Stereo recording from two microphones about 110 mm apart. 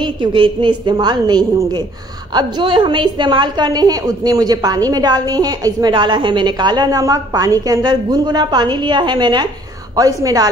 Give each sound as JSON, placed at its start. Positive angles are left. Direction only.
{"t": 0.0, "sound": "a woman's voice", "side_deg": -50}